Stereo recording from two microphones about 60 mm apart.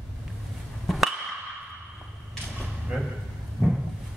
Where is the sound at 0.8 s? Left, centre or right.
Centre.